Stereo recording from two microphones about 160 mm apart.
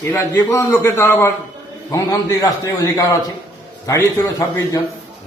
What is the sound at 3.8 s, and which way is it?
Speech, 20° left (ahead or behind).